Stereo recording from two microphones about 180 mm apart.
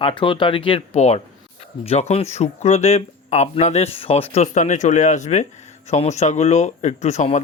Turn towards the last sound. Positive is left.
turn(degrees=40)  # may be behind; listen again after turning